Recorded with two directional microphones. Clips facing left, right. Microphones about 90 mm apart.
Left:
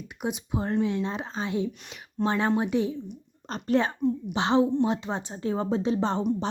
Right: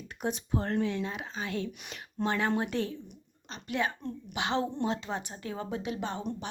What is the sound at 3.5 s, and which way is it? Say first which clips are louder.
A woman's voice: left 7 dB; 40° left (ahead or behind).